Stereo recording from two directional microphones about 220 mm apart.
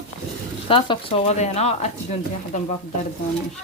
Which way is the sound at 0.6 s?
25° left (ahead or behind).